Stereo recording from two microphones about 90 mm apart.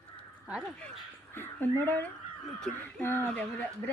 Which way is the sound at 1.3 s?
25° left (ahead or behind).